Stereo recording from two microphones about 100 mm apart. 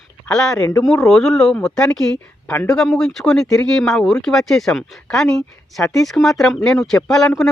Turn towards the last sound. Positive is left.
turn(degrees=5)  # may be behind; listen again after turning